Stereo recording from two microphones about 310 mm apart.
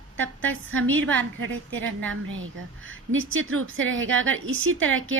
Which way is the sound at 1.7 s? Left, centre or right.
Centre.